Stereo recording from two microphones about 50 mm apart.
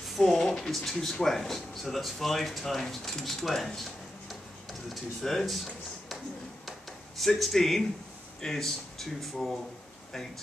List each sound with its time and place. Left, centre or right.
0.2 s speech: centre
3.4 s a sound: centre
4.8 s speech: centre
7.2 s speech: centre